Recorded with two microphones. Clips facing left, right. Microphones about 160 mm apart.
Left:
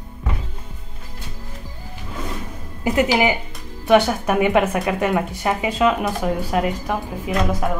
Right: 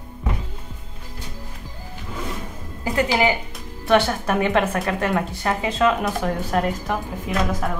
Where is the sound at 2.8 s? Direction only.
15° left (ahead or behind).